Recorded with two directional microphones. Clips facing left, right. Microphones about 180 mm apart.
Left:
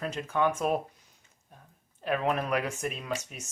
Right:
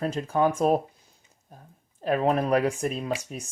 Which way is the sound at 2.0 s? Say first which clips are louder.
Right 5 dB; 35° right (ahead or behind).